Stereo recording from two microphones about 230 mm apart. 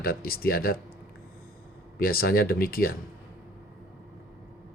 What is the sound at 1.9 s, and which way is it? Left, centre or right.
Speech, left.